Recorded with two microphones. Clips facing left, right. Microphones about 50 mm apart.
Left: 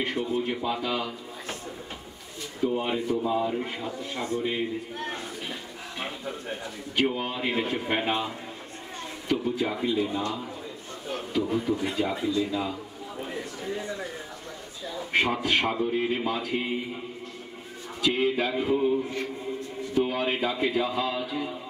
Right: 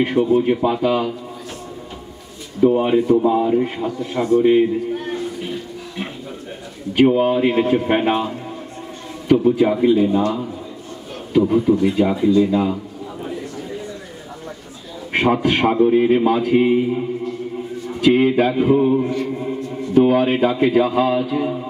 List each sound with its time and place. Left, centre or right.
0.1 s a man's voice: right
2.6 s a man's voice: right
7.2 s a man's voice: right
11.3 s speech: right
11.7 s a man's voice: right
15.4 s a man's voice: right
18.0 s a man's voice: right